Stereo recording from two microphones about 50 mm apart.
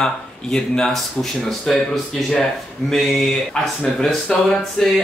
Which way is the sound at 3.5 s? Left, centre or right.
Centre.